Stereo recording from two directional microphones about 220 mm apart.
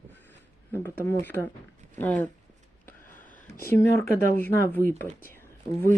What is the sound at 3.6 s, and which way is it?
Speech, 10° left (ahead or behind).